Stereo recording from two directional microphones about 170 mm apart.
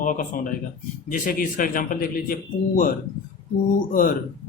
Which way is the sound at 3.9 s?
55° left (ahead or behind).